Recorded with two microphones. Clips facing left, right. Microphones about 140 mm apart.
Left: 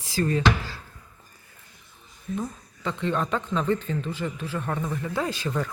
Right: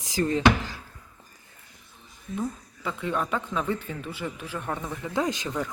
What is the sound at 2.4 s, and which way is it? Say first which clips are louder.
Speech: right 5 dB; 5° right (ahead or behind).